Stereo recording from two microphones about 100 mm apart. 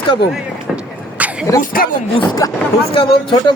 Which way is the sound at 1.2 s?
15° right (ahead or behind).